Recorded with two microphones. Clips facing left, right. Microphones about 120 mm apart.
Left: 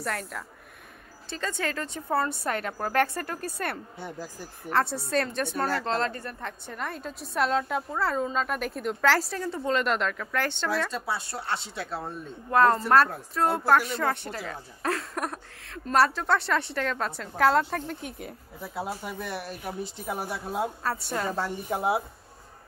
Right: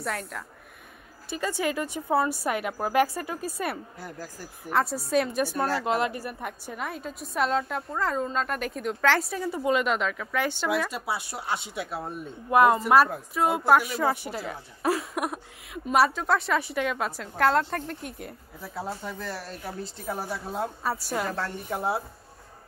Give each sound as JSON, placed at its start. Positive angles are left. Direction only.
{"t": 0.0, "sound": "speech", "side_deg": 0}
{"t": 12.7, "sound": "speech", "side_deg": 0}
{"t": 18.9, "sound": "a woman's voice", "side_deg": 10}
{"t": 20.3, "sound": "speech", "side_deg": 5}